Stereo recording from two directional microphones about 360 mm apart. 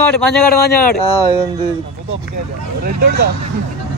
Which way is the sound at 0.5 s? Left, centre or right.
Left.